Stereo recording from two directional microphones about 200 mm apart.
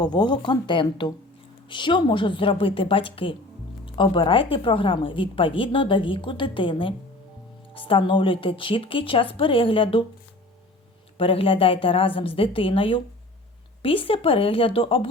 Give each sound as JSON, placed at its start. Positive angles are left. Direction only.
{"t": 0.0, "sound": "a woman's voice", "side_deg": 20}
{"t": 11.2, "sound": "a woman's voice", "side_deg": 25}